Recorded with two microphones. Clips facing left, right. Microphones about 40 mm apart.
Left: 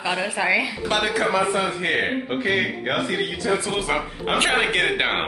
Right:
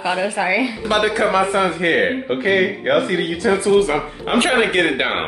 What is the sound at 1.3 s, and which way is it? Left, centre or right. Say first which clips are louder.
Speech: right 4 dB; right.